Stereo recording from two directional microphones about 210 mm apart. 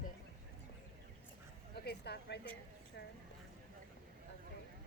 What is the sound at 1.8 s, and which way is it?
Speech, 50° left (ahead or behind).